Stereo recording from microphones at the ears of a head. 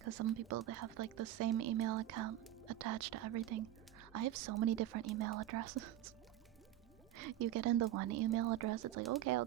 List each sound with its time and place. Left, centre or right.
0.0 s speech: right
7.2 s speech: right